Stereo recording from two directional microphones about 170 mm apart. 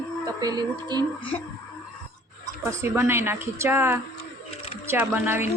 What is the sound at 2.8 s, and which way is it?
A woman's voice, 15° right (ahead or behind).